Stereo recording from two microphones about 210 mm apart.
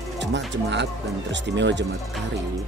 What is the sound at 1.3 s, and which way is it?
Speech, 55° right (ahead or behind).